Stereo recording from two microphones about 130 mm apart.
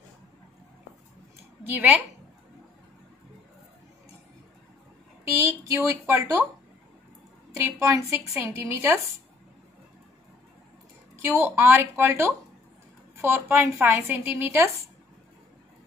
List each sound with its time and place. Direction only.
1.6 s a woman's voice: 15° right (ahead or behind)
5.2 s a woman's voice: 20° right (ahead or behind)
7.5 s a woman's voice: 25° right (ahead or behind)
11.1 s a woman's voice: 20° right (ahead or behind)